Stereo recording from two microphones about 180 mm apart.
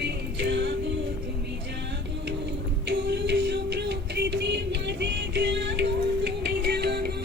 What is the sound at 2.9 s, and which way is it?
Music, 70° right (ahead or behind).